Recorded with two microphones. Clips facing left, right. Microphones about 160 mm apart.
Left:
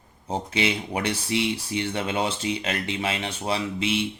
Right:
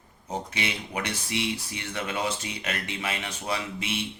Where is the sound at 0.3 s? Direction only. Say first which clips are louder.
Left 6 dB; 30° left (ahead or behind).